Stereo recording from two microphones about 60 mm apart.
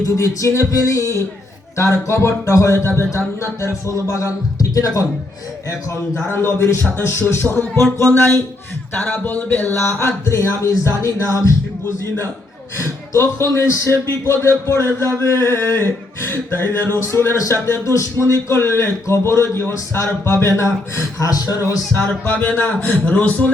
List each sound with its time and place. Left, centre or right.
0.0 s speech: left
2.7 s a man's voice: left
6.3 s a man's voice: left
9.0 s speech: centre
9.2 s speech: left
9.8 s speech: left
12.8 s a man's voice: left
22.2 s speech: left